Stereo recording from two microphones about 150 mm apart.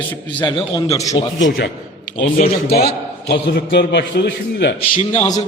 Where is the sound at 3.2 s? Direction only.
90° left.